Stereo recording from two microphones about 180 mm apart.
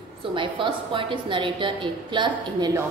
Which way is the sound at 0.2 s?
30° right (ahead or behind).